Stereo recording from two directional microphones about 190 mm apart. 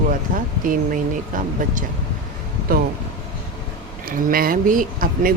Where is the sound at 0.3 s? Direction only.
45° right (ahead or behind).